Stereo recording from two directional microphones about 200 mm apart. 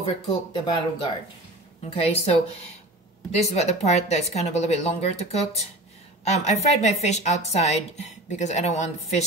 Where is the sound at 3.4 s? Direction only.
35° left (ahead or behind).